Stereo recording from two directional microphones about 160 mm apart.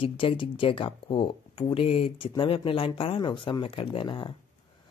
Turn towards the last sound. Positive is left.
turn(degrees=30)  # may be behind; listen again after turning